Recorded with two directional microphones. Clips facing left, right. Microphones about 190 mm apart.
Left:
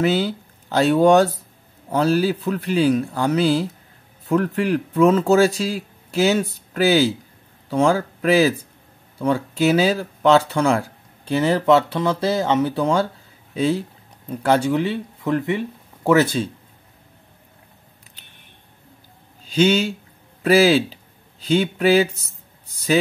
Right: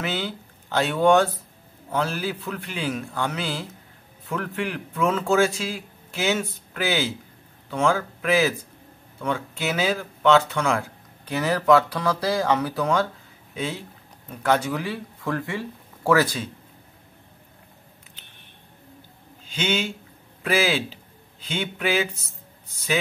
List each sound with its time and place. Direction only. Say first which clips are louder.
0.0 s speech: left 9 dB; 40° left (ahead or behind)
19.4 s speech: left 9 dB; 35° left (ahead or behind)